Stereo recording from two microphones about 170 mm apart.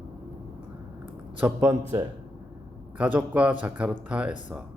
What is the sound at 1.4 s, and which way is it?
Speech, 10° right (ahead or behind).